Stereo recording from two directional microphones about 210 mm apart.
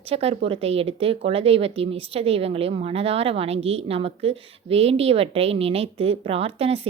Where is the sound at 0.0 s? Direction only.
30° right (ahead or behind).